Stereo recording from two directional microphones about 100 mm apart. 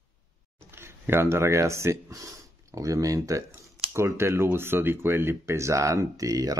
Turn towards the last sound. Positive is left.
turn(degrees=-35)  # may be behind; listen again after turning